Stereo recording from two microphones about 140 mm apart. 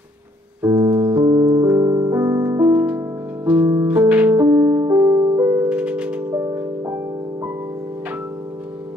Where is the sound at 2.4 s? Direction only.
15° right (ahead or behind).